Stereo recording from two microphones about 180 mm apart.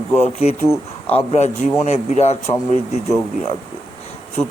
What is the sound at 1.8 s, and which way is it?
Speech, 40° left (ahead or behind).